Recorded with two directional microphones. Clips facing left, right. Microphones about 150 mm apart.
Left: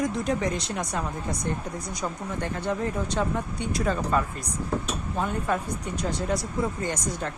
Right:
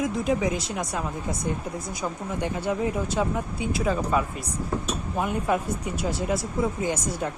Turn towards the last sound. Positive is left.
turn(degrees=-10)  # may be behind; listen again after turning